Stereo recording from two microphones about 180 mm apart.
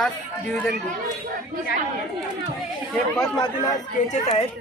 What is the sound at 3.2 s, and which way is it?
Speech, 20° left (ahead or behind).